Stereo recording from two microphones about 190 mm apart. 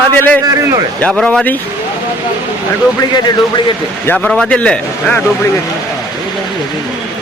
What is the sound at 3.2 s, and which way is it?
Speech, 20° left (ahead or behind).